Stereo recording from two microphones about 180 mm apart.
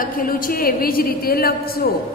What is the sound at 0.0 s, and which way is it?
Mantra, 50° left (ahead or behind).